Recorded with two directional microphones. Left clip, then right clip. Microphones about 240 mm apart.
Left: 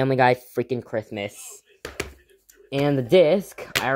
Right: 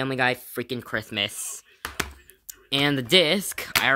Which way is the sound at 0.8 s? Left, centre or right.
Right.